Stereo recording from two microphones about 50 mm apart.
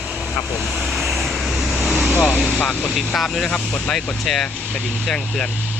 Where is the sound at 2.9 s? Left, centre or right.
Centre.